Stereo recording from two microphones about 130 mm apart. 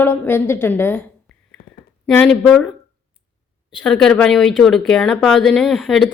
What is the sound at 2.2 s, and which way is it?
Speech, centre (ahead or behind).